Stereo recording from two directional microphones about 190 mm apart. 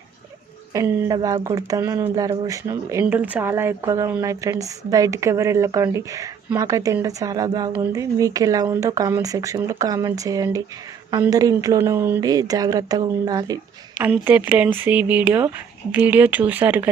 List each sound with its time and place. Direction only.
0.7 s speech: 20° right (ahead or behind)
14.0 s speech: 10° right (ahead or behind)